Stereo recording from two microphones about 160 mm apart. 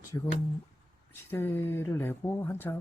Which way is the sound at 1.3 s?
15° left (ahead or behind).